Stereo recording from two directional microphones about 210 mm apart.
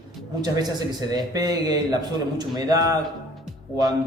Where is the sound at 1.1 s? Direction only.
20° right (ahead or behind).